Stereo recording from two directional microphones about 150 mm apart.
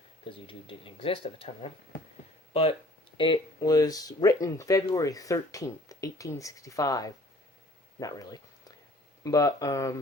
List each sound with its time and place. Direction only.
0.3 s speech: 35° left (ahead or behind)
3.2 s speech: 30° left (ahead or behind)